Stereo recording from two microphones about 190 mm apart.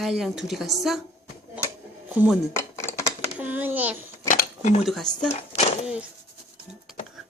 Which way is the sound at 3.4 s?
10° right (ahead or behind).